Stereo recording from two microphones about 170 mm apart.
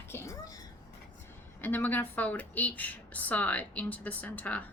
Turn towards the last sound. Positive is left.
turn(degrees=10)  # may be behind; listen again after turning